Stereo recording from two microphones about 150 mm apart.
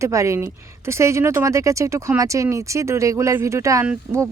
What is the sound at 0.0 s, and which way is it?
A woman's voice, 20° right (ahead or behind).